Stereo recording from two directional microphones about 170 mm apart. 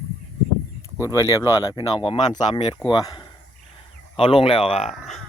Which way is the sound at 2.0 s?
30° left (ahead or behind).